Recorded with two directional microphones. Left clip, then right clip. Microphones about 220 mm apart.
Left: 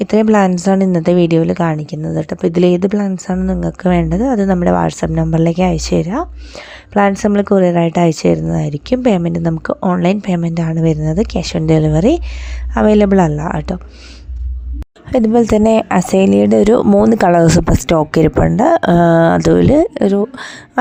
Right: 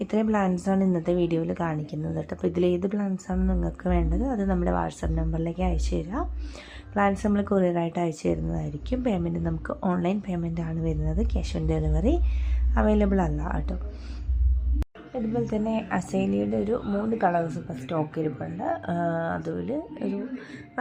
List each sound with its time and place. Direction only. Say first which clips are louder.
0.0 s a woman's voice: left 14 dB; 40° left (ahead or behind)
15.1 s speech: left 17 dB; 50° left (ahead or behind)